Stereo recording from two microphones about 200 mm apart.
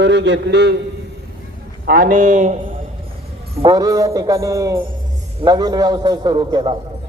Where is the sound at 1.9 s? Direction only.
40° right (ahead or behind).